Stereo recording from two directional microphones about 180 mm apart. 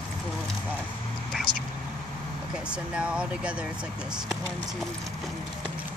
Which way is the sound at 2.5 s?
5° right (ahead or behind).